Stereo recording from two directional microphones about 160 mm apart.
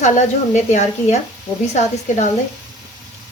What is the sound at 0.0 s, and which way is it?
Speech, 45° left (ahead or behind).